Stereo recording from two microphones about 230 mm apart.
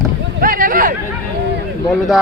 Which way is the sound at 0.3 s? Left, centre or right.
Right.